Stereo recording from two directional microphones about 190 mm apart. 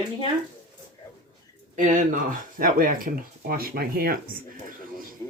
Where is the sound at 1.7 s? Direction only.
40° right (ahead or behind).